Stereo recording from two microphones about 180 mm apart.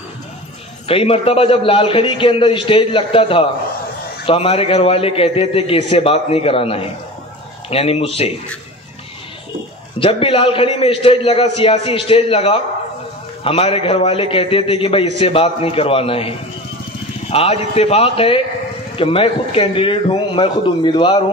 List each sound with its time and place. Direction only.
0.8 s a man's voice: 30° left (ahead or behind)
9.9 s a man's voice: 30° left (ahead or behind)